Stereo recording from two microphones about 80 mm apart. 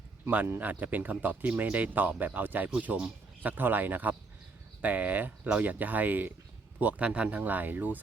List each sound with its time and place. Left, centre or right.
0.3 s speech: right